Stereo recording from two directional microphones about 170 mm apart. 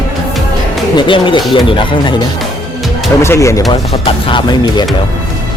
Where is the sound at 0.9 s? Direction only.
30° left (ahead or behind).